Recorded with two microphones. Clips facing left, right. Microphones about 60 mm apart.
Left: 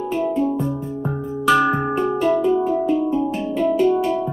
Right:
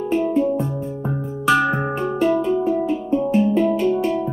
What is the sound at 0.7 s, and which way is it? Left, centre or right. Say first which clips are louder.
Music: even; centre.